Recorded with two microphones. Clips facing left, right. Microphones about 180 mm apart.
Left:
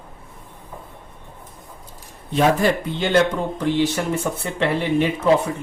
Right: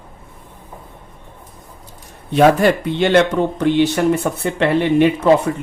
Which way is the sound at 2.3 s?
65° right (ahead or behind).